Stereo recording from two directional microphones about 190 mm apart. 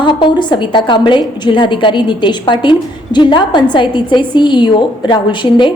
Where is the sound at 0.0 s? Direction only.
25° left (ahead or behind).